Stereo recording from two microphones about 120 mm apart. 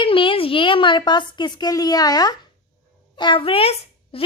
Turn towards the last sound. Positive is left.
turn(degrees=50)  # may be behind; listen again after turning